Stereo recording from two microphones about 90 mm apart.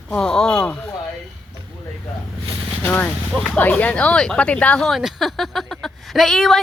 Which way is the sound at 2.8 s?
20° left (ahead or behind).